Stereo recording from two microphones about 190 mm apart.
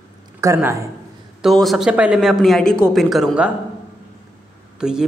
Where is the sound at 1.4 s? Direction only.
Centre (ahead or behind).